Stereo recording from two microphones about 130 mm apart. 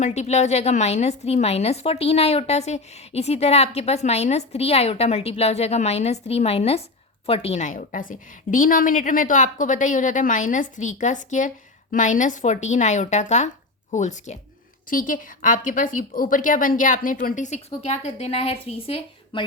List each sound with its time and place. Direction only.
0.0 s a woman's voice: 60° left (ahead or behind)
14.8 s speech: 90° left; by 19.5 s 45° left (ahead or behind)